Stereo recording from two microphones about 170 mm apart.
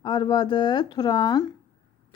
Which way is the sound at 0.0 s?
25° left (ahead or behind).